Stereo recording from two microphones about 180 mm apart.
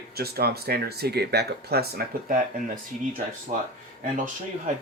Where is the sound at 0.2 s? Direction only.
60° right (ahead or behind).